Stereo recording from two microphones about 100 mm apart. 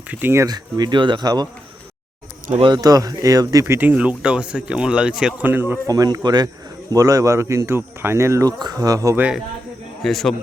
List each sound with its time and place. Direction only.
0.1 s speech: 20° right (ahead or behind)
0.4 s speech: 45° right (ahead or behind)
2.6 s speech: 50° right (ahead or behind)
3.8 s speech: 15° right (ahead or behind)
5.5 s speech: 20° right (ahead or behind)
5.9 s speech: 40° right (ahead or behind)
10.0 s a man's voice: centre (ahead or behind)